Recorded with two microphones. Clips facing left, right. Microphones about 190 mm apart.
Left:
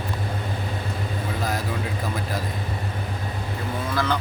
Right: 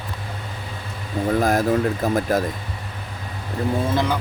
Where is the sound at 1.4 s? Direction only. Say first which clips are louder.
Right 10 dB; 50° right (ahead or behind).